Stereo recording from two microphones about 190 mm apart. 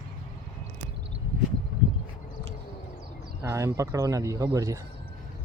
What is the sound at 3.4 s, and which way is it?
Speech, 15° right (ahead or behind).